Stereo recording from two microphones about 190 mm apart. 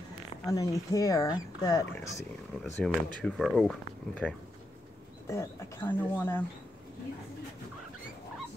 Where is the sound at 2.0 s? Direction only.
Centre (ahead or behind).